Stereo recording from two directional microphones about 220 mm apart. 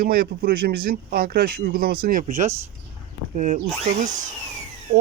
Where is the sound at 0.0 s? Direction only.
40° right (ahead or behind).